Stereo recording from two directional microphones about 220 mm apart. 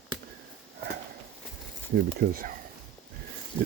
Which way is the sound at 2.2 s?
40° right (ahead or behind).